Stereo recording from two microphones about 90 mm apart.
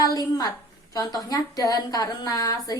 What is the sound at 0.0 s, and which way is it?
A woman's voice, 45° left (ahead or behind).